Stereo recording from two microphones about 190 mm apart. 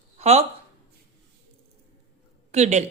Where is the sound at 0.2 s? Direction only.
35° right (ahead or behind).